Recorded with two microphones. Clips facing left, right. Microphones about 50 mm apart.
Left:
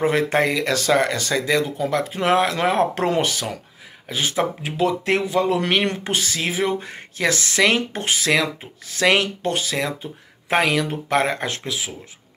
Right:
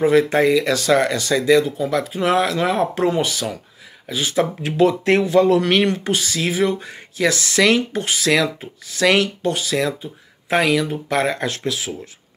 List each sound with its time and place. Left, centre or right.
0.0 s speech: left
1.8 s speech: left
3.3 s speech: left
4.7 s speech: centre
5.9 s speech: left
9.4 s speech: left; by 11.9 s centre